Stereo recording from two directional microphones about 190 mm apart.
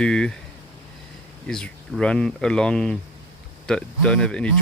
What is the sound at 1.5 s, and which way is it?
Speech, 5° left (ahead or behind).